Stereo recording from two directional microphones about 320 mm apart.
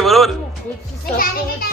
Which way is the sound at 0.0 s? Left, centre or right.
Centre.